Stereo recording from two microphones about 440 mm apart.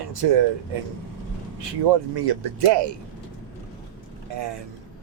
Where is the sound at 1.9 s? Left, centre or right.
Right.